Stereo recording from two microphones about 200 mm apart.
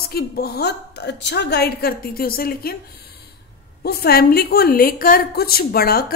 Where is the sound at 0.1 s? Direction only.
55° left (ahead or behind).